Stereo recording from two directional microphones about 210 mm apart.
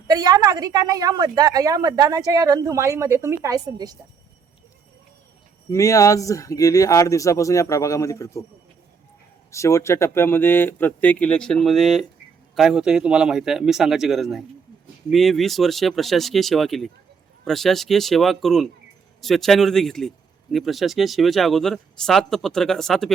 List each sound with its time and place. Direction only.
0.1 s a woman's voice: 20° right (ahead or behind)
5.7 s speech: 15° left (ahead or behind)
9.5 s a man's voice: 15° left (ahead or behind)